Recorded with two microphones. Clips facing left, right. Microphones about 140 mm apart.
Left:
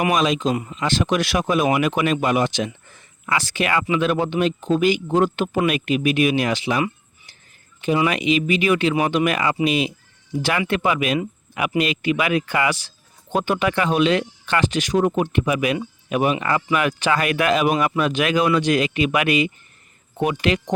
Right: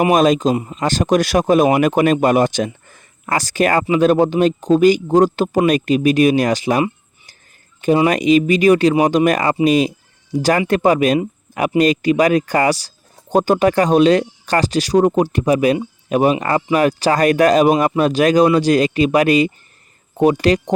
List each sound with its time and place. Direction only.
0.1 s speech: 45° right (ahead or behind)
0.5 s speech: 30° right (ahead or behind)
0.8 s speech: 40° right (ahead or behind)
2.8 s a sound: 45° right (ahead or behind)
3.8 s a man's voice: 40° right (ahead or behind)
7.9 s a man's voice: 40° right (ahead or behind)